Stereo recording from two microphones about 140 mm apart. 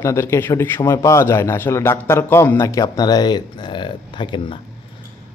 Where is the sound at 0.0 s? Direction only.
20° left (ahead or behind); by 4.6 s 35° left (ahead or behind).